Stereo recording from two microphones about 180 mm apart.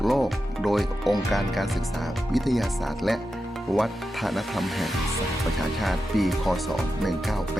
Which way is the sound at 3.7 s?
Centre (ahead or behind).